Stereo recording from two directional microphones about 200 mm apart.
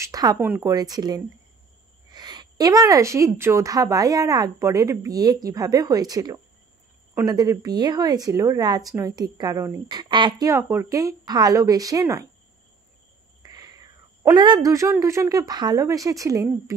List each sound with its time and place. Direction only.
0.0 s a woman's voice: 20° right (ahead or behind)
13.4 s speech: 20° right (ahead or behind)